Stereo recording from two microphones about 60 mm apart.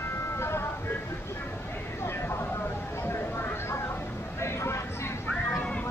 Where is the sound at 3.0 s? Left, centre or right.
Left.